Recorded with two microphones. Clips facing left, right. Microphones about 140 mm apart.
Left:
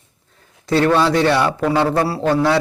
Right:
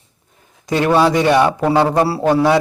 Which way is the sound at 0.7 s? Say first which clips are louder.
Right 1 dB; 15° right (ahead or behind).